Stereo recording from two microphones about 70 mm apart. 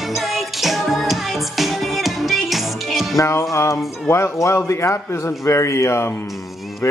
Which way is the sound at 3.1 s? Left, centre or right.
Left.